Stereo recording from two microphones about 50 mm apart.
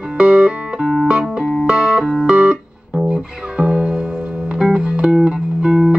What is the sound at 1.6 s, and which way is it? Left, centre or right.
Music, centre.